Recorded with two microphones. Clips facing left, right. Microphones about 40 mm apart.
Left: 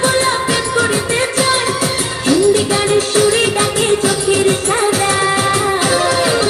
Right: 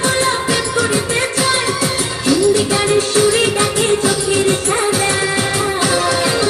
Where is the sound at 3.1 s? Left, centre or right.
Left.